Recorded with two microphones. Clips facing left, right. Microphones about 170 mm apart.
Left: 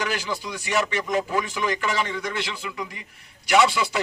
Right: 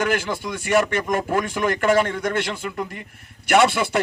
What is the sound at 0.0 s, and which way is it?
A man's voice, 50° right (ahead or behind).